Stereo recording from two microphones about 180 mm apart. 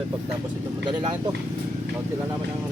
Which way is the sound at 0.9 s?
25° right (ahead or behind).